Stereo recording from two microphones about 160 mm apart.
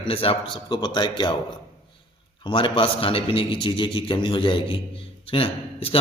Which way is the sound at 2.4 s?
30° left (ahead or behind).